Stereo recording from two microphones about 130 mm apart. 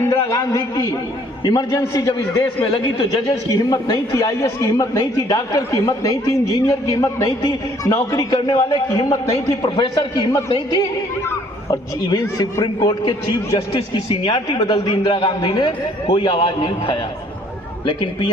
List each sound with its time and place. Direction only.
0.1 s a man's voice: 25° left (ahead or behind)
2.4 s a man's voice: 40° left (ahead or behind)